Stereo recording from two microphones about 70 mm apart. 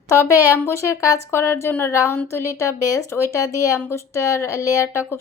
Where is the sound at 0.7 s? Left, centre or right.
Left.